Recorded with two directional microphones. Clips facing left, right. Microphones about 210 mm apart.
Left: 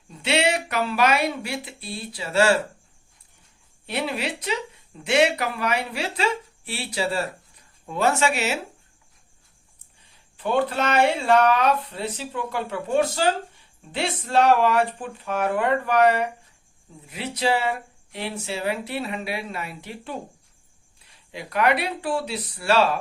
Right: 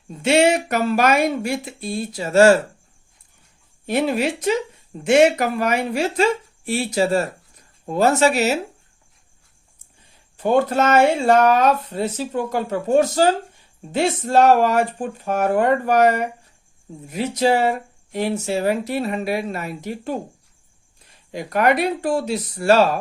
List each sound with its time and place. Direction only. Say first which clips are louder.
0.2 s speech: right 7 dB; 45° right (ahead or behind)
3.8 s speech: right 8 dB; 45° right (ahead or behind)
10.3 s speech: right 5 dB; 45° right (ahead or behind)